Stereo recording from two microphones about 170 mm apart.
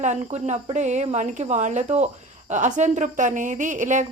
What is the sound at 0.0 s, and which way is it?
A woman's voice, 40° right (ahead or behind).